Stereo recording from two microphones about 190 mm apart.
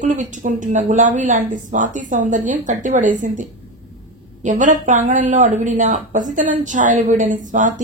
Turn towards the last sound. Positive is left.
turn(degrees=-40)  # may be behind; listen again after turning